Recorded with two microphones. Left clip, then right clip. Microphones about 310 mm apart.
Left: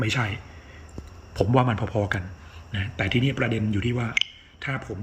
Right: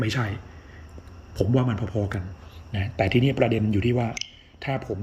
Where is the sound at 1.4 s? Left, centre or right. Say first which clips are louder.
Left 3 dB; centre.